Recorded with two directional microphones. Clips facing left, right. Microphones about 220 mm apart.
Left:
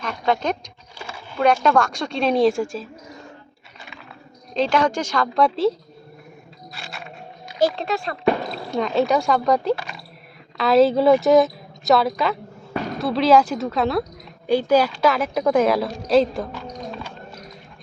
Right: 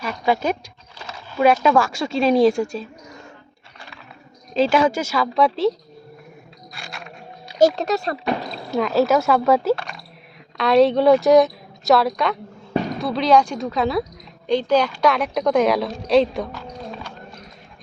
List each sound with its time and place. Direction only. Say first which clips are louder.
0.0 s a woman's voice: right 1 dB; 5° right (ahead or behind)
4.5 s a woman's voice: right 2 dB; 5° right (ahead or behind)
6.7 s a sound: even; centre (ahead or behind)
7.8 s speech: right 3 dB; 40° right (ahead or behind)
8.7 s a woman's voice: right 2 dB; 5° right (ahead or behind)